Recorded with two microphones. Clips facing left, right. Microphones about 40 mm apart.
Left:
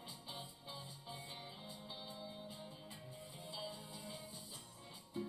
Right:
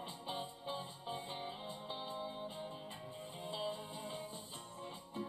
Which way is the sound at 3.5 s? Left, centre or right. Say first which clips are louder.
Right 7 dB; right.